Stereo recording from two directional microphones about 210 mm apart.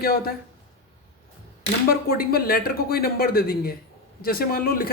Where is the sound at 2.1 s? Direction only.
45° left (ahead or behind).